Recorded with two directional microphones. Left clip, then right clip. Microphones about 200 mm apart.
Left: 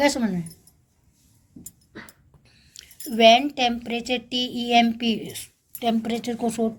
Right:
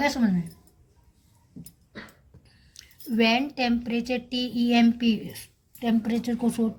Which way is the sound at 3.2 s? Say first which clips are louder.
Left 8 dB; 40° left (ahead or behind).